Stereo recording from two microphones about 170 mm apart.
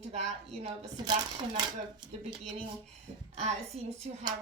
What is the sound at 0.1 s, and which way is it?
Speech, 40° right (ahead or behind).